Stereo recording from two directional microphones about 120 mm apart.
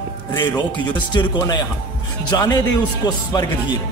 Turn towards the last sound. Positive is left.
turn(degrees=35)  # may be behind; listen again after turning